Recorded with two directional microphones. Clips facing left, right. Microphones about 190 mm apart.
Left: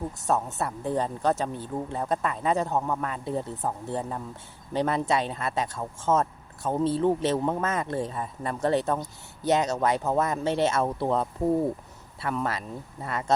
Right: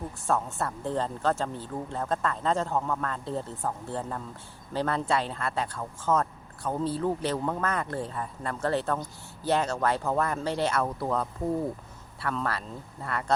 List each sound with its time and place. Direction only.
0.3 s speech: 20° left (ahead or behind)